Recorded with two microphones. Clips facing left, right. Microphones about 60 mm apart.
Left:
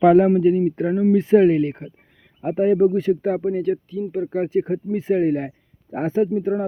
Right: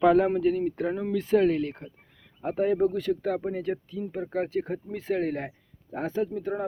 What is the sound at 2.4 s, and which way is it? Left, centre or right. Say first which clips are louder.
Speech: left 7 dB; centre.